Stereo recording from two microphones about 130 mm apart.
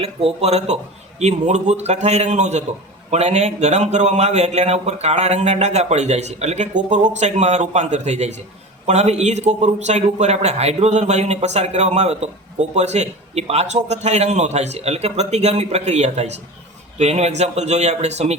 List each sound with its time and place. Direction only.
0.0 s a man's voice: 50° right (ahead or behind)